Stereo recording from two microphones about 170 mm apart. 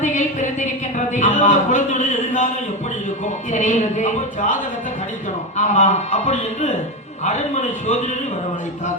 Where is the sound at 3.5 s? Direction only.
45° left (ahead or behind).